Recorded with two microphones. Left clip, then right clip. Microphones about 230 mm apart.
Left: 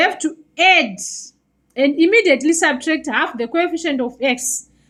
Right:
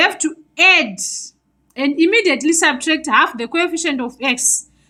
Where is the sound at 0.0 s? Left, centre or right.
Centre.